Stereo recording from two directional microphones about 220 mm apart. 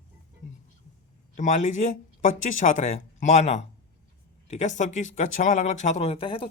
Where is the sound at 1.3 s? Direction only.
35° left (ahead or behind).